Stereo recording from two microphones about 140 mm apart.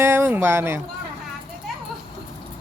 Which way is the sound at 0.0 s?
15° right (ahead or behind).